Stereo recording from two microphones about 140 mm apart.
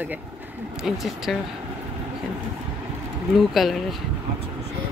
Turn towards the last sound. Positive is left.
turn(degrees=0)  # may be behind; listen again after turning